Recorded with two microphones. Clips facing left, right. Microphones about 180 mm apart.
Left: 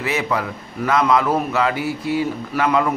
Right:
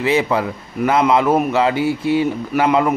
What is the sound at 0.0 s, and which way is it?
A man's voice, 30° right (ahead or behind).